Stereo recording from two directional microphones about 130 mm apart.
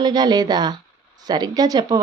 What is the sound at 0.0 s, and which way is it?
Speech, 35° right (ahead or behind).